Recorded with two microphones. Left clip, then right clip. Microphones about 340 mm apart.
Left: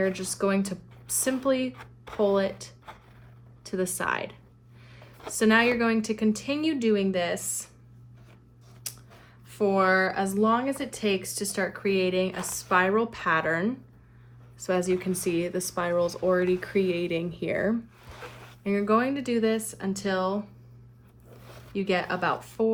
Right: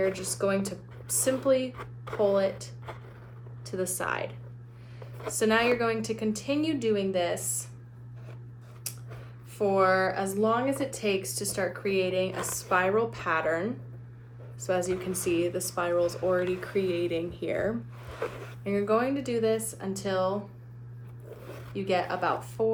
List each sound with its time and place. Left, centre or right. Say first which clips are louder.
0.0 s a woman's voice: left 1 dB; centre
8.9 s a sound: left 1 dB; left
9.5 s a woman's voice: left 1 dB; left
21.8 s a woman's voice: left 1 dB; left